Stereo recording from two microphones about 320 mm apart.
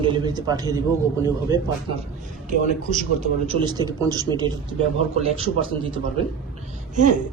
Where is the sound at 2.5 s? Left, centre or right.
Right.